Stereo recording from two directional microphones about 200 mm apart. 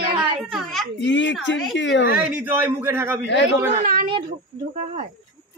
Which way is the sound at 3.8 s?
45° right (ahead or behind).